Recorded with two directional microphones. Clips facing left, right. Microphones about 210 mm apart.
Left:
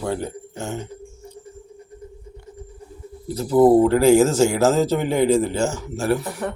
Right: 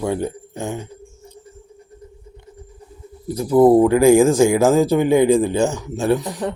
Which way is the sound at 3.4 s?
10° right (ahead or behind).